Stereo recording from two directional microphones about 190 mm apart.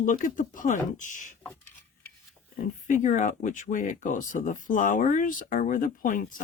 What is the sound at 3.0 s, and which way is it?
Speech, 40° left (ahead or behind).